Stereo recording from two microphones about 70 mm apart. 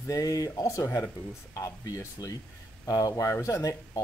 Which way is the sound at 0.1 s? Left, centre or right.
Left.